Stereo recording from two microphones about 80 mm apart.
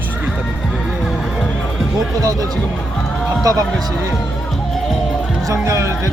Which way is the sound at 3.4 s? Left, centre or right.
Right.